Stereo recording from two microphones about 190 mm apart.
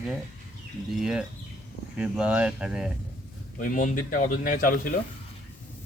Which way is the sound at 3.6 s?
45° left (ahead or behind).